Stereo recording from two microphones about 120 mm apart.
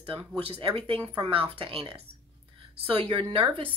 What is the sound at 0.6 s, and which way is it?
Speech, 45° right (ahead or behind).